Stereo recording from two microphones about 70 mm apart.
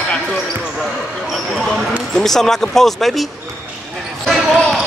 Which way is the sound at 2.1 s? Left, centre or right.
Centre.